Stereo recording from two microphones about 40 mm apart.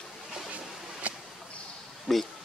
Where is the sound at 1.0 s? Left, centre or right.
Right.